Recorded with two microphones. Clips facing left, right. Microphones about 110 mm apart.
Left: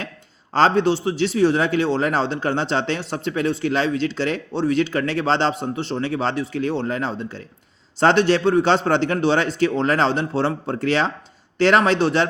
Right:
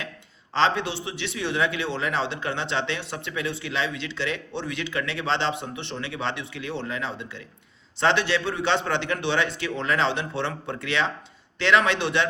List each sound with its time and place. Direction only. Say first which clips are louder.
0.5 s speech: left 7 dB; 40° left (ahead or behind)